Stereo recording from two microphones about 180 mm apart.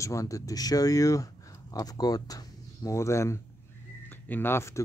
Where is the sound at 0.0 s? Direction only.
15° left (ahead or behind).